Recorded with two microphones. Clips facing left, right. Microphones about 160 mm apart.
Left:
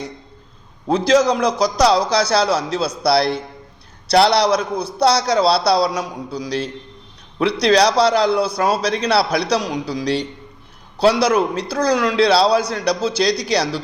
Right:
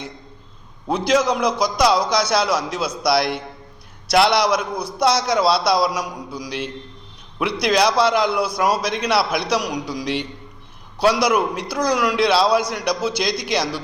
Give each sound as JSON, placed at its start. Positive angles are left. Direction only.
{"t": 0.9, "sound": "a man's voice", "side_deg": 30}